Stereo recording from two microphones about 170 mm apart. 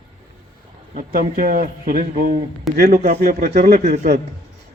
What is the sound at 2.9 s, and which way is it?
Speech, 45° right (ahead or behind).